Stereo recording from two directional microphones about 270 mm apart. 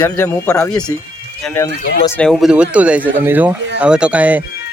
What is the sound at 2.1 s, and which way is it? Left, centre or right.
A man's voice, centre.